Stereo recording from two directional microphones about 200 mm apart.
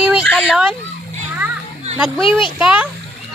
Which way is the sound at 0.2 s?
5° left (ahead or behind).